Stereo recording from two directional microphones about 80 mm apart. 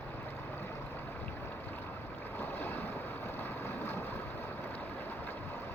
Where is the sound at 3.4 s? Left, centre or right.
Left.